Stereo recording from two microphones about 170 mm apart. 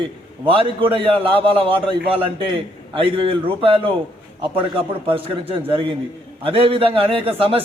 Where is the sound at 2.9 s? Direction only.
30° right (ahead or behind).